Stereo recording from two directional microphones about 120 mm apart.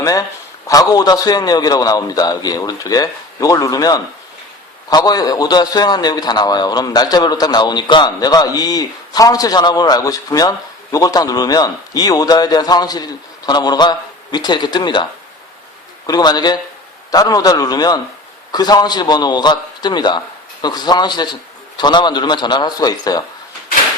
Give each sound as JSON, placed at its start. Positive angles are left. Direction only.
{"t": 0.0, "sound": "a man's voice", "side_deg": 30}
{"t": 16.0, "sound": "a man's voice", "side_deg": 35}